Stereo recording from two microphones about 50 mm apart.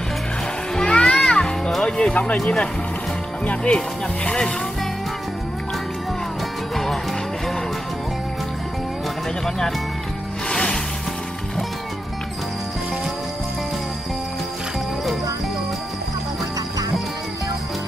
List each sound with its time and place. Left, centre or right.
0.7 s music: centre
1.9 s speech: centre
10.5 s music: centre